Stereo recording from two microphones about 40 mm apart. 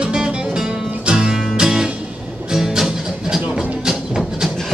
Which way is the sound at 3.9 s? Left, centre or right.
Centre.